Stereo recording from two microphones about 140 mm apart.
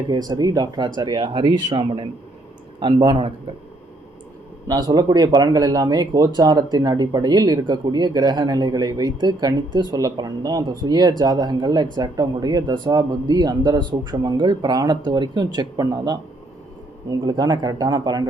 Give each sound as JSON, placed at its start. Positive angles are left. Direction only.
{"t": 0.1, "sound": "speech", "side_deg": -30}
{"t": 4.7, "sound": "speech", "side_deg": -30}